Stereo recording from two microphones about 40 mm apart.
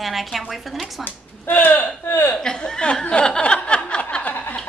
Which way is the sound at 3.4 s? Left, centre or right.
Left.